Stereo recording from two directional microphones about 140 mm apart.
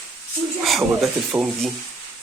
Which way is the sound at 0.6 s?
Centre (ahead or behind).